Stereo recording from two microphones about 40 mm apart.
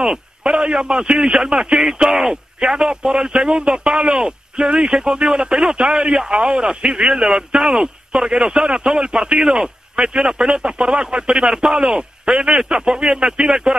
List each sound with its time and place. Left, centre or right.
0.4 s a man's voice: right